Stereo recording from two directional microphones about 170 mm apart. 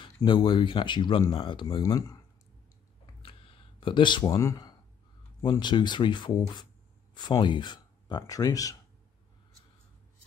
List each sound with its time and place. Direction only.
0.0 s speech: 30° left (ahead or behind)
3.2 s a sound: 30° left (ahead or behind)
5.4 s speech: 25° left (ahead or behind)